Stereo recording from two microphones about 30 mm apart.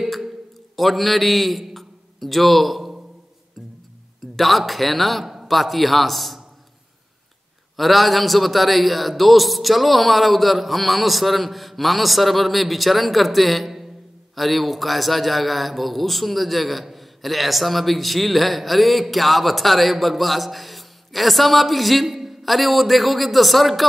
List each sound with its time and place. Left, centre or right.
0.7 s a man's voice: centre
4.4 s a man's voice: centre
5.2 s a sound: centre
5.5 s a man's voice: centre
7.7 s a man's voice: centre